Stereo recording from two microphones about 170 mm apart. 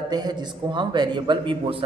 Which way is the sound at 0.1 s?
25° right (ahead or behind).